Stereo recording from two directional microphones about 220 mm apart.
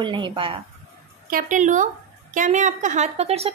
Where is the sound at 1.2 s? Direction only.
40° right (ahead or behind).